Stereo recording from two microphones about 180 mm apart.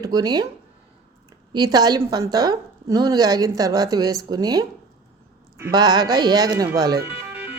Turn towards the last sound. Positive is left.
turn(degrees=-10)  # may be behind; listen again after turning